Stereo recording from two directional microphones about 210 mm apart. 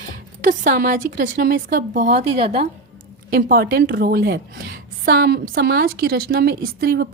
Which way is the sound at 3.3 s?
45° right (ahead or behind).